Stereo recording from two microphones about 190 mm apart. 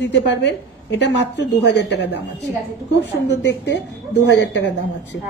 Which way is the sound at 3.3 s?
65° left (ahead or behind).